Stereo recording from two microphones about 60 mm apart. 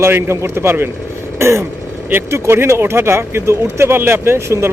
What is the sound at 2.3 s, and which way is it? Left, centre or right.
Speech, right.